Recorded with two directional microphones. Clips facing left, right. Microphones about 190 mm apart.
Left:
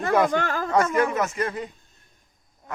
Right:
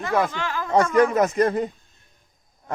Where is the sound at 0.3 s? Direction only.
50° left (ahead or behind).